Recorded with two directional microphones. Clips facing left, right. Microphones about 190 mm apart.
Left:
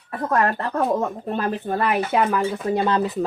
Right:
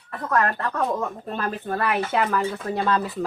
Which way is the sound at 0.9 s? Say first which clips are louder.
Left 4 dB; 20° left (ahead or behind).